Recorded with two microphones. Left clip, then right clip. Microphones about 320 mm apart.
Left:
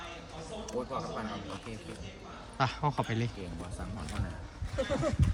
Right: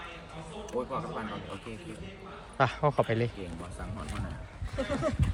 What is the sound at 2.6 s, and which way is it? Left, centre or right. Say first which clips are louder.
Speech: right 5 dB; centre.